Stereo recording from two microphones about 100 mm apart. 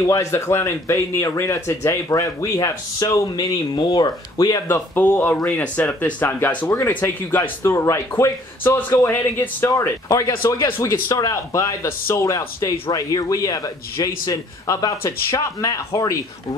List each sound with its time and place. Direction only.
0.0 s speech: 30° left (ahead or behind)
4.9 s speech: 20° left (ahead or behind)
9.7 s speech: 30° left (ahead or behind)